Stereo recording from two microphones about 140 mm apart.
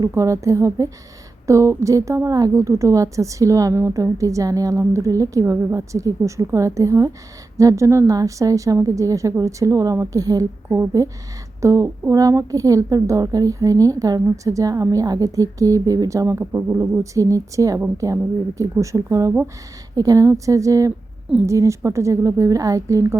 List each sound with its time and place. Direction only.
0.0 s a woman's voice: 20° right (ahead or behind)